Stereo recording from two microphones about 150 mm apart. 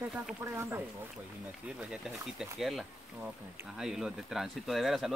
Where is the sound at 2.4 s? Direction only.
Centre (ahead or behind).